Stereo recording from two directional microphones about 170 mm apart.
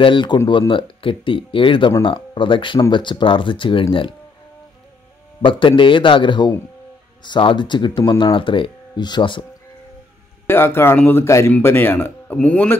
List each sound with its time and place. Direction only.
0.0 s speech: 30° left (ahead or behind)
5.4 s speech: 30° left (ahead or behind)
10.4 s speech: 15° left (ahead or behind)